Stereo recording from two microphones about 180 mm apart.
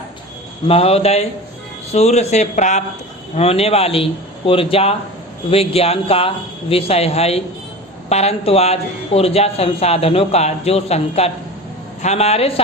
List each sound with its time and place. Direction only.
0.7 s speech: 35° left (ahead or behind)